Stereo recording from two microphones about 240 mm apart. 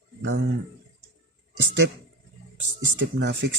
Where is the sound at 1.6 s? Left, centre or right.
Right.